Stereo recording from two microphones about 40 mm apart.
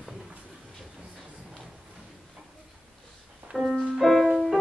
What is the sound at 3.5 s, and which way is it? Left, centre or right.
Music, centre.